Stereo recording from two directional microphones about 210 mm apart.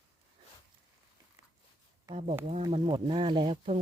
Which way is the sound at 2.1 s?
15° right (ahead or behind).